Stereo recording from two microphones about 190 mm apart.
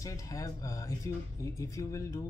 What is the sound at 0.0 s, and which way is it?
Speech, 15° left (ahead or behind).